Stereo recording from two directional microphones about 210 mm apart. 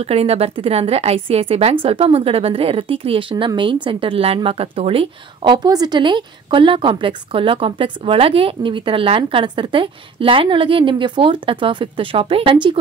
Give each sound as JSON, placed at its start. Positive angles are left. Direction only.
{"t": 0.0, "sound": "a woman's voice", "side_deg": -30}